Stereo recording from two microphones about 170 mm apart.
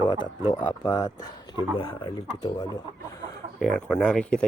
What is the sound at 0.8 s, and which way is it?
Speech, 25° left (ahead or behind).